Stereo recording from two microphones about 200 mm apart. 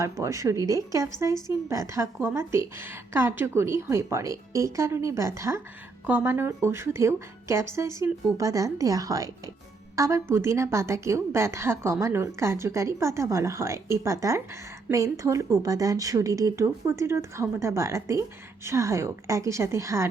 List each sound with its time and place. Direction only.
0.0 s a woman's voice: 15° right (ahead or behind)